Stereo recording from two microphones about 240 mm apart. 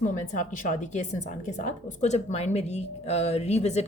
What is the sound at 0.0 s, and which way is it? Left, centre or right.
Speech, left.